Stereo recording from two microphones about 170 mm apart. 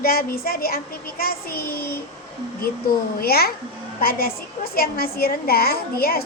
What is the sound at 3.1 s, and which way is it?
A woman's voice, 65° left (ahead or behind).